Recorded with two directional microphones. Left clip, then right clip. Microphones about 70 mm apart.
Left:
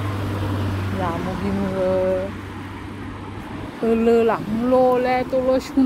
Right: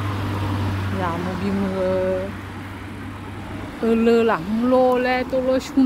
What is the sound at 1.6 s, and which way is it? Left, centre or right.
Speech, centre.